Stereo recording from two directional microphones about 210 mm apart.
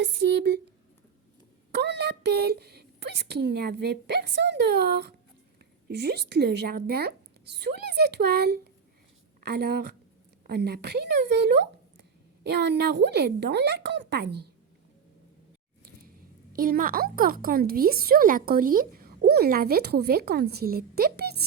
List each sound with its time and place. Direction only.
0.0 s speech: 55° right (ahead or behind)
1.7 s a woman's voice: 55° right (ahead or behind)
15.8 s speech: 45° right (ahead or behind)